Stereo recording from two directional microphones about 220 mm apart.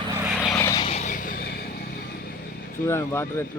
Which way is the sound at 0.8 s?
30° left (ahead or behind).